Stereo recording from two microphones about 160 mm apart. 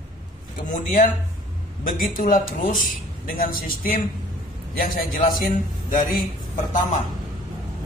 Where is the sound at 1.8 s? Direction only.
60° left (ahead or behind).